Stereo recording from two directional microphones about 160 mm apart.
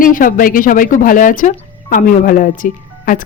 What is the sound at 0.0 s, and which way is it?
Speech, 60° left (ahead or behind).